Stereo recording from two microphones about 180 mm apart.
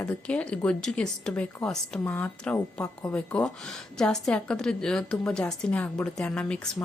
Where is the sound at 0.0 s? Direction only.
5° left (ahead or behind).